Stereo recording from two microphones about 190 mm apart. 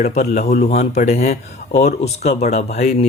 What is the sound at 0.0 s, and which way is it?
Speech, 40° left (ahead or behind).